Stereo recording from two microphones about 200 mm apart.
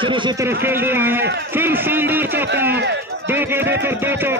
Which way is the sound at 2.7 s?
60° right (ahead or behind).